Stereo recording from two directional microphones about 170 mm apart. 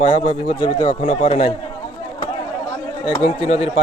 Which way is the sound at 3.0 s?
35° left (ahead or behind).